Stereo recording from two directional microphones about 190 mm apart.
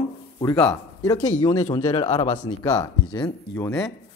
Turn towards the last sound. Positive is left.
turn(degrees=5)  # may be behind; listen again after turning